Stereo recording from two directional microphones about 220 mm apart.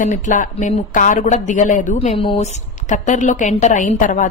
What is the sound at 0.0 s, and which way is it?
Speech, 35° left (ahead or behind).